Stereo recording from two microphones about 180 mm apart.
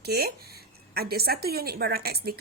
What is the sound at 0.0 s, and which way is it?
A woman's voice, 60° right (ahead or behind).